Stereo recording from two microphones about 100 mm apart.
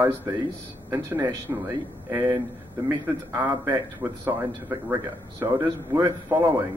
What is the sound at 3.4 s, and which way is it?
Speech, 20° right (ahead or behind).